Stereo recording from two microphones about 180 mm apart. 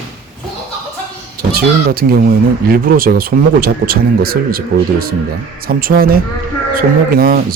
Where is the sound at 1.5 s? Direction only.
55° right (ahead or behind).